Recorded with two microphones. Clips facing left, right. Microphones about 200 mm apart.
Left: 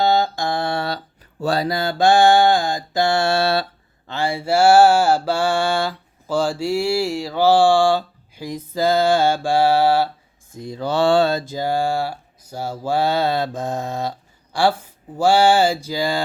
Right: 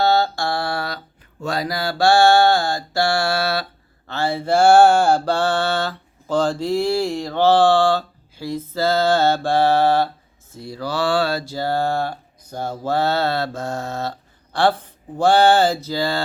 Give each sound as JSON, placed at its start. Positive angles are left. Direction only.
{"t": 0.0, "sound": "mantra", "side_deg": 15}
{"t": 4.1, "sound": "mantra", "side_deg": 15}